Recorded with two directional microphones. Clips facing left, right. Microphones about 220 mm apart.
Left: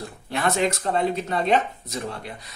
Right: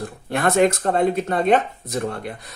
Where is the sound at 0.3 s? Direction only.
55° right (ahead or behind).